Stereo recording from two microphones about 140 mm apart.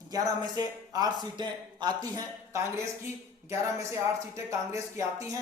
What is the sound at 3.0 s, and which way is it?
Speech, 20° right (ahead or behind).